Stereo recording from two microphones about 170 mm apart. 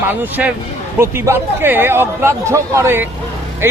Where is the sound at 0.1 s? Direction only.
10° right (ahead or behind).